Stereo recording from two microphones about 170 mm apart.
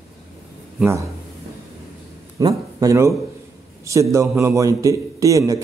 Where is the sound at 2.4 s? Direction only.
20° right (ahead or behind).